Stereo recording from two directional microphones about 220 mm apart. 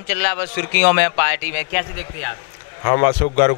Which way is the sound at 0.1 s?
10° left (ahead or behind).